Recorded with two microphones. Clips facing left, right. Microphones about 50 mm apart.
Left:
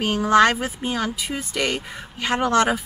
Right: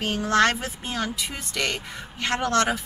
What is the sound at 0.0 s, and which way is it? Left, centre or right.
Speech, centre.